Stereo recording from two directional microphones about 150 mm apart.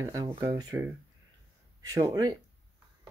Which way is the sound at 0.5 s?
25° right (ahead or behind).